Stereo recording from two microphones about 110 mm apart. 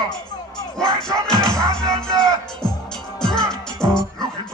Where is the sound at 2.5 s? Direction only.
5° left (ahead or behind).